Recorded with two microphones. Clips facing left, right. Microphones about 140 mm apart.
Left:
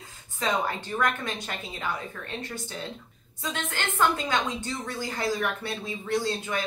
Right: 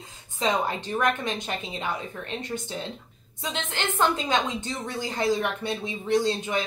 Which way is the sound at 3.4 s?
20° right (ahead or behind).